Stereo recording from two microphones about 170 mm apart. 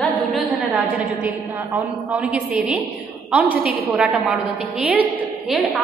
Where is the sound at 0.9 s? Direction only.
10° right (ahead or behind).